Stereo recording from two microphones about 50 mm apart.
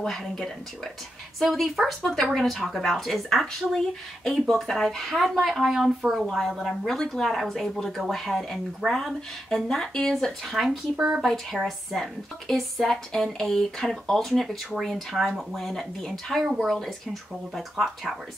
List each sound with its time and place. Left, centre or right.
0.0 s speech: centre
10.5 s speech: centre
11.0 s speech: centre
11.6 s speech: centre